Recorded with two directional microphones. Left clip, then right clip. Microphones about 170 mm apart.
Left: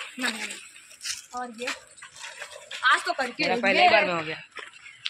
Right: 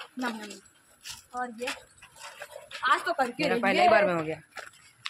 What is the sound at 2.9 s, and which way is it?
Speech, 45° right (ahead or behind).